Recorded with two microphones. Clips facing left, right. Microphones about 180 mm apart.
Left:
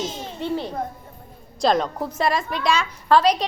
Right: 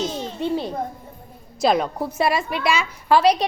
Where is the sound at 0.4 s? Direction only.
15° right (ahead or behind).